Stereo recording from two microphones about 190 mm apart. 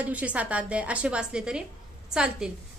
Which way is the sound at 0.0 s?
5° right (ahead or behind).